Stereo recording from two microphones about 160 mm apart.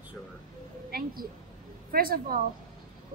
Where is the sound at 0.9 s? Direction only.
65° right (ahead or behind).